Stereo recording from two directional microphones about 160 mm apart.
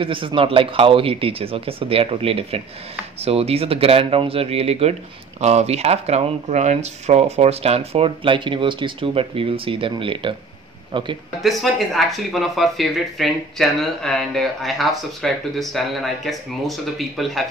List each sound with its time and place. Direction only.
0.0 s a man's voice: 35° right (ahead or behind)
11.4 s speech: centre (ahead or behind)